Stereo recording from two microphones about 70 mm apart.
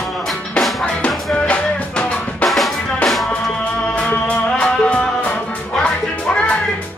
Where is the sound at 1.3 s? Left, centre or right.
Centre.